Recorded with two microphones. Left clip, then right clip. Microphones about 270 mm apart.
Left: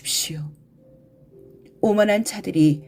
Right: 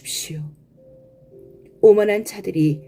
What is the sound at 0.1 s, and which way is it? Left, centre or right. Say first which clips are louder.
Whispering: left 4 dB; left.